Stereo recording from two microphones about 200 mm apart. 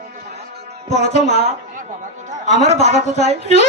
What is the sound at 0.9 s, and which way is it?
Speech, 35° left (ahead or behind).